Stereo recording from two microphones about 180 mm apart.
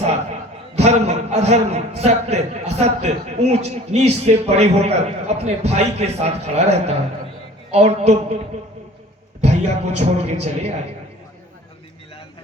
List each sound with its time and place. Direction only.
0.8 s a man's voice: 35° right (ahead or behind)
9.4 s a man's voice: 35° right (ahead or behind)